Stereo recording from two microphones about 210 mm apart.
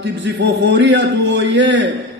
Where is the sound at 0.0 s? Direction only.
55° right (ahead or behind).